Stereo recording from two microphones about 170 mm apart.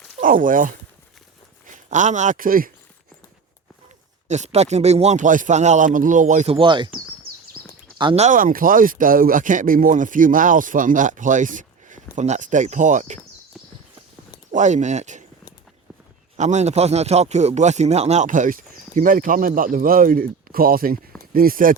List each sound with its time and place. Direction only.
0.2 s speech: 55° right (ahead or behind)
4.3 s speech: 40° right (ahead or behind)
7.6 s a sound: 5° right (ahead or behind)
7.9 s speech: 30° right (ahead or behind)
8.2 s speech: 50° right (ahead or behind)
14.5 s speech: 45° right (ahead or behind)
16.4 s speech: 45° right (ahead or behind)